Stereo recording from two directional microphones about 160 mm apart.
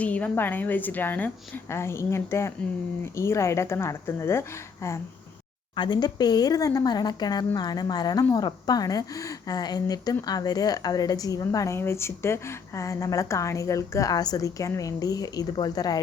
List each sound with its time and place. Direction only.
0.0 s a woman's voice: 10° left (ahead or behind)
5.7 s a woman's voice: 30° left (ahead or behind)